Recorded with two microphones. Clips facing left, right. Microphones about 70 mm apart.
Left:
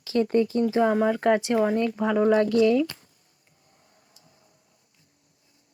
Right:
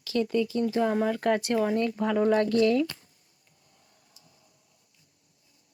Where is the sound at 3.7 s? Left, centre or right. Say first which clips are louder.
Left 4 dB; left.